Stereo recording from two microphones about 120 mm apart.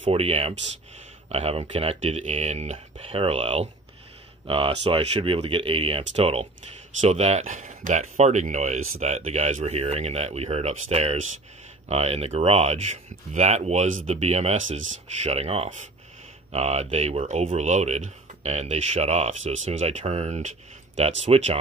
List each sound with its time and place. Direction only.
0.1 s speech: 55° right (ahead or behind)
7.0 s speech: 65° right (ahead or behind)